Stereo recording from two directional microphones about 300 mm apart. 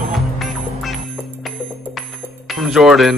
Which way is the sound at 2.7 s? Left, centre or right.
Centre.